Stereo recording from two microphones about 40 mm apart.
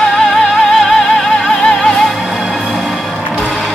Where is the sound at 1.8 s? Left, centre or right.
Centre.